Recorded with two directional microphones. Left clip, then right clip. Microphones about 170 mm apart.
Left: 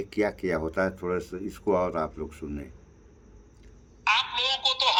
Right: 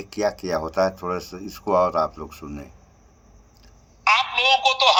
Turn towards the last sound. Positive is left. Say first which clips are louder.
# right 8 dB
turn(degrees=-30)  # may be behind; listen again after turning